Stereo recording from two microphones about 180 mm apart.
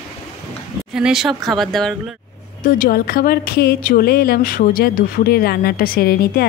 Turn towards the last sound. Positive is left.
turn(degrees=60)  # may be behind; listen again after turning